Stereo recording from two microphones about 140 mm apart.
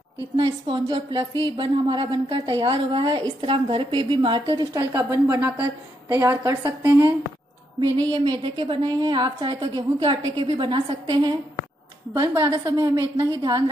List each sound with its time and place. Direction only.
0.4 s a woman's voice: 35° right (ahead or behind)
8.1 s speech: 35° right (ahead or behind)
12.1 s a woman's voice: 20° right (ahead or behind)